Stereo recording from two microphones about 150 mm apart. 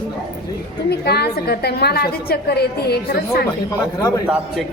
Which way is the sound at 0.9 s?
90° left.